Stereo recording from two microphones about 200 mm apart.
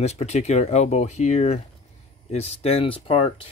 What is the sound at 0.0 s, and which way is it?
Speech, 35° left (ahead or behind).